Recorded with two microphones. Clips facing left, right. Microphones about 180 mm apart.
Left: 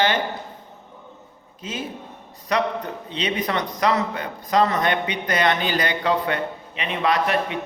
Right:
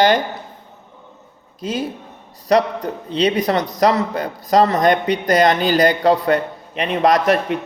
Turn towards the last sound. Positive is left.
turn(degrees=-40)  # may be behind; listen again after turning